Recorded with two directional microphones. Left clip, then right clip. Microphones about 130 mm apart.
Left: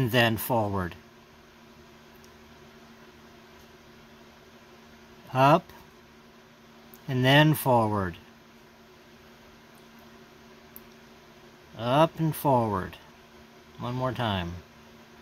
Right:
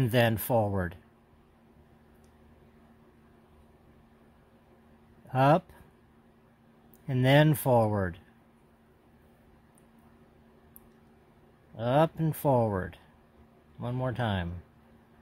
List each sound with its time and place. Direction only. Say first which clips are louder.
0.0 s speech: left 2 dB; 45° right (ahead or behind)
5.3 s speech: left 3 dB; 40° right (ahead or behind)
7.1 s speech: left 3 dB; 40° right (ahead or behind)
11.7 s speech: left 3 dB; 40° right (ahead or behind)